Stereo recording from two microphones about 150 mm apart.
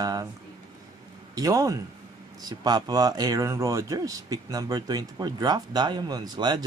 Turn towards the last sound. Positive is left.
turn(degrees=-30)  # may be behind; listen again after turning